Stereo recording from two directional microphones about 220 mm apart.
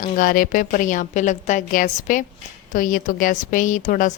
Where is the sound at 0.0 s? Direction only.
40° left (ahead or behind).